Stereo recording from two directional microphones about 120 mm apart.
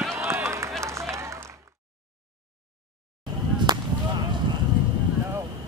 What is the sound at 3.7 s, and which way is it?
Whip, 35° right (ahead or behind).